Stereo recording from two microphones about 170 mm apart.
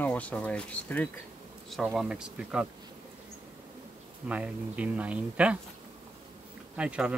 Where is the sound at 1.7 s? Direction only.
Centre (ahead or behind).